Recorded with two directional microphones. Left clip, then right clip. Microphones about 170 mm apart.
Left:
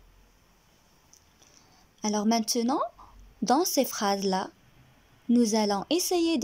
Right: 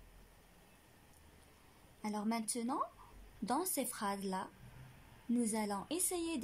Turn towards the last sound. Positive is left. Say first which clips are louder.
# left 14 dB
turn(degrees=55)  # may be behind; listen again after turning